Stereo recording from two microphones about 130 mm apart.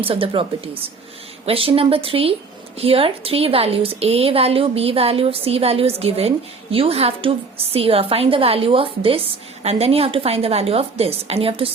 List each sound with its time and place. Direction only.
0.0 s a woman's voice: 45° right (ahead or behind)